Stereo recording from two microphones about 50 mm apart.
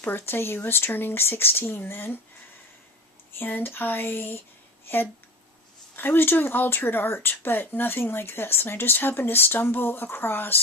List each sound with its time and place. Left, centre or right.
0.0 s speech: left
3.3 s speech: left
6.0 s speech: left